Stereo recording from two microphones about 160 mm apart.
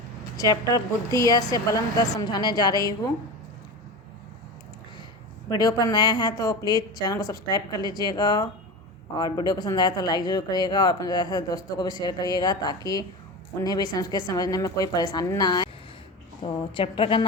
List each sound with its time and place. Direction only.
0.3 s speech: 20° left (ahead or behind)
5.5 s a woman's voice: 25° left (ahead or behind)